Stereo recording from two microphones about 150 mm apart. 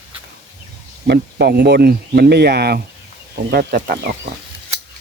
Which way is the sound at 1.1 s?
90° right.